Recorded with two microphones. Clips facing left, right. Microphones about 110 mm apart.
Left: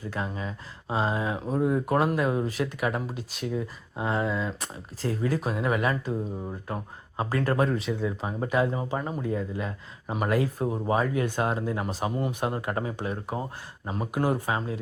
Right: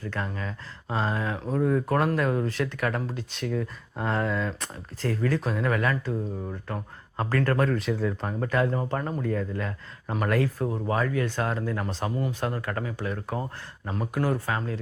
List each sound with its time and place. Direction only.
0.0 s speech: 15° left (ahead or behind)
7.8 s speech: centre (ahead or behind); by 11.9 s 20° left (ahead or behind)
11.9 s speech: 10° left (ahead or behind)